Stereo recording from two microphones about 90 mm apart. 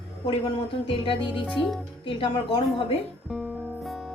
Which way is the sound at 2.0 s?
65° left (ahead or behind).